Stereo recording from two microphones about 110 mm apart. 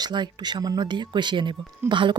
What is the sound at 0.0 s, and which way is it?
Speech, 40° right (ahead or behind).